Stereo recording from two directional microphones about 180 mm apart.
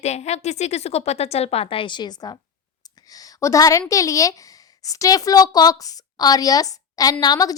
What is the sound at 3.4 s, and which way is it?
A woman's voice, 20° left (ahead or behind).